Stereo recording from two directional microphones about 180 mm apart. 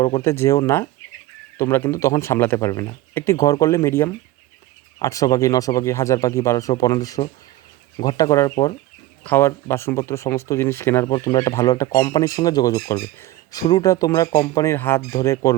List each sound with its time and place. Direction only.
0.2 s speech: 15° left (ahead or behind)